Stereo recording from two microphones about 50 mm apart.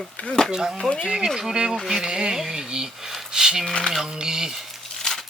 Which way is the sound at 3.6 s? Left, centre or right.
Centre.